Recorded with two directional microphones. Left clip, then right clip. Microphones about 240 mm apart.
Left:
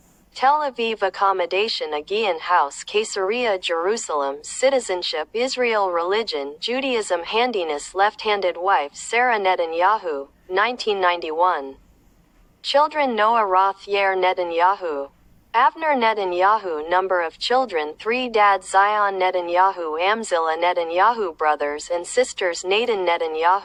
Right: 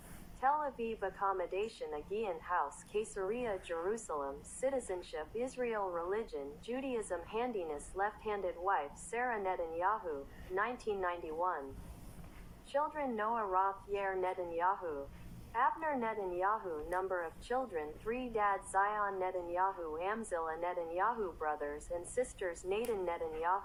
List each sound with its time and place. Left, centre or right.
0.3 s a woman's voice: left
12.7 s a woman's voice: left